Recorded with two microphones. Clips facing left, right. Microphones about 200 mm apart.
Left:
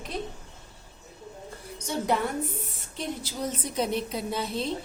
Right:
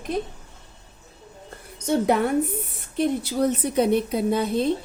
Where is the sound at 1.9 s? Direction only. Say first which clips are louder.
Right 7 dB; 55° right (ahead or behind).